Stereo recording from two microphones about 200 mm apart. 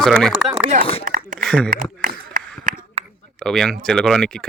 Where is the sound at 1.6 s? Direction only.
40° right (ahead or behind).